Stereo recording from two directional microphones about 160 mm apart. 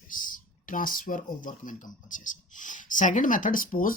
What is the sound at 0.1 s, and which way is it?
Speech, 55° left (ahead or behind).